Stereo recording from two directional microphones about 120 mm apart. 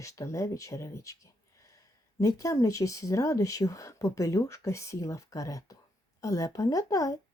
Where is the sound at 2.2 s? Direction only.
25° left (ahead or behind).